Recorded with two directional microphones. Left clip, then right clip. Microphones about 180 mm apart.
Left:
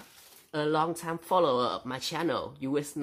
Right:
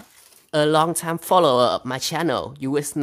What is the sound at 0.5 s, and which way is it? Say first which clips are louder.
Speech: right 10 dB; 55° right (ahead or behind).